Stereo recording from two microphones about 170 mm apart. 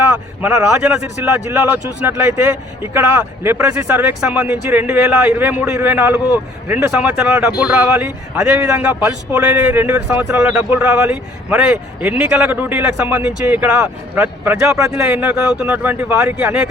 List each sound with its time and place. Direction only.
0.4 s speech: 15° right (ahead or behind)